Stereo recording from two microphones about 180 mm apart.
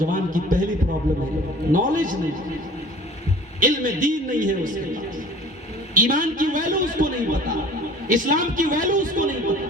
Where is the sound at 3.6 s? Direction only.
45° right (ahead or behind).